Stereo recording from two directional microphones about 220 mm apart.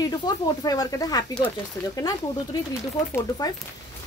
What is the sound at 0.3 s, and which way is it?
Speech, 20° left (ahead or behind).